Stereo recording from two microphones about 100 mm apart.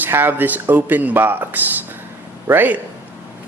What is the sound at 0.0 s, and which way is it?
Speech, 20° right (ahead or behind).